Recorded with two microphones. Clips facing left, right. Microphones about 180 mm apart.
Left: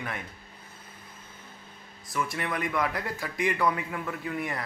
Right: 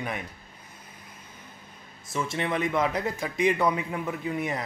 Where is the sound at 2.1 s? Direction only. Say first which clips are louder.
Right 3 dB; 25° right (ahead or behind).